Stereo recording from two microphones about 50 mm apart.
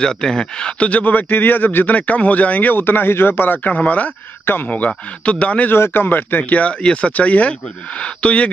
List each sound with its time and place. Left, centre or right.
0.0 s a man's voice: centre
5.7 s a man's voice: left